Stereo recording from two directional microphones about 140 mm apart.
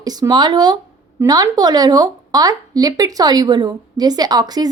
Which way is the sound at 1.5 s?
30° right (ahead or behind).